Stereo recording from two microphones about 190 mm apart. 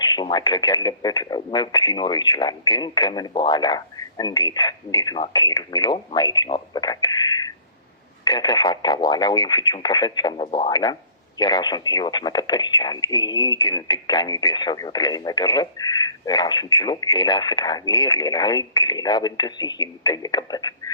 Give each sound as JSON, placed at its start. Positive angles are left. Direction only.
{"t": 0.0, "sound": "speech", "side_deg": 20}